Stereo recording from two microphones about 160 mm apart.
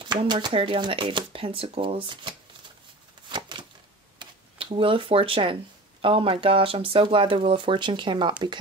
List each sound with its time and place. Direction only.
0.0 s speech: 30° right (ahead or behind)
3.3 s a sound: 30° right (ahead or behind)
4.2 s speech: 30° right (ahead or behind)